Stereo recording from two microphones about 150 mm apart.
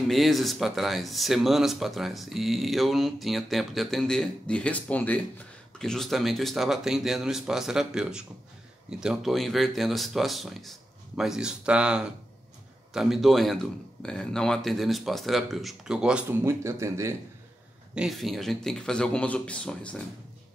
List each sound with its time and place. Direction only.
0.1 s speech: centre (ahead or behind)
16.4 s speech: 20° right (ahead or behind)
17.9 s speech: centre (ahead or behind)